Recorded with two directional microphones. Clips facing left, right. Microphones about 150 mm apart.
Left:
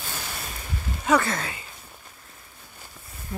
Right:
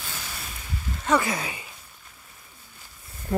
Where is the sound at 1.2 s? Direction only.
15° right (ahead or behind).